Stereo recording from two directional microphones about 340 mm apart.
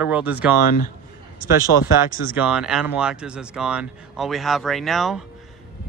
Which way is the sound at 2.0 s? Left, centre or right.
Centre.